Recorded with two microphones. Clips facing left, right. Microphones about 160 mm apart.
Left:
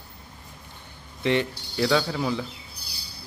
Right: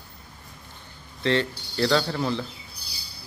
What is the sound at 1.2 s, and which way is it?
Speech, 15° left (ahead or behind).